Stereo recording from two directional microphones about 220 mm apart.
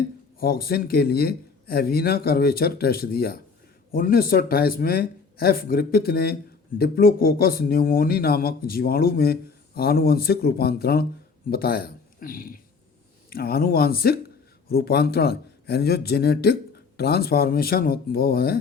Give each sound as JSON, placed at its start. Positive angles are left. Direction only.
{"t": 0.3, "sound": "speech", "side_deg": 40}